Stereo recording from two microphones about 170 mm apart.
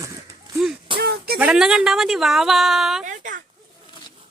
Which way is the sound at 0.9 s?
65° right (ahead or behind).